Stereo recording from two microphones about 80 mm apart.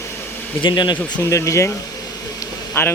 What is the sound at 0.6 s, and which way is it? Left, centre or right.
Speech, left.